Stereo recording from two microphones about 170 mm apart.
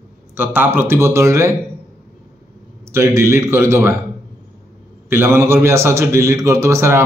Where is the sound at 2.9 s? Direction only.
15° right (ahead or behind).